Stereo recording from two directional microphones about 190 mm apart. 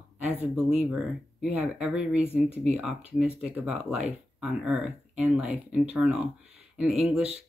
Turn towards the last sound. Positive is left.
turn(degrees=-5)  # may be behind; listen again after turning